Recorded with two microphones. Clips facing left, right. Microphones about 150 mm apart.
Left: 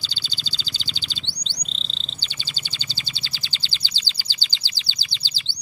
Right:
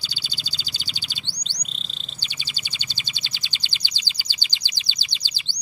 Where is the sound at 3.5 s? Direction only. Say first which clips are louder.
Left 1 dB; 15° right (ahead or behind).